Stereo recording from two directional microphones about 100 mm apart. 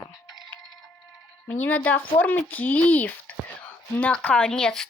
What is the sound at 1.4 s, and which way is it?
Speech, 15° left (ahead or behind).